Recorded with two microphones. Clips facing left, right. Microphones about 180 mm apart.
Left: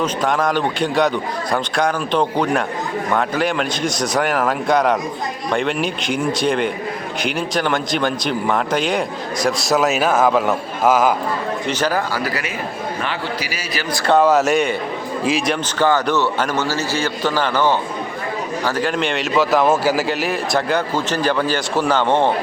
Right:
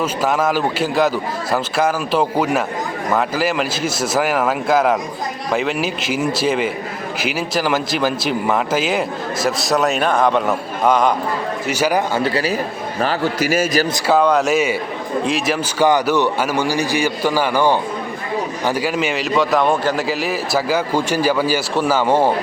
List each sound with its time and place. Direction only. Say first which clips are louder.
0.0 s a man's voice: right 1 dB; 5° right (ahead or behind)
11.7 s speech: right 4 dB; 10° right (ahead or behind); by 12.5 s 30° right (ahead or behind)
13.0 s a man's voice: right 10 dB; 40° right (ahead or behind)
14.1 s a man's voice: left 1 dB; centre (ahead or behind)
15.8 s a man's voice: right 2 dB; 10° right (ahead or behind)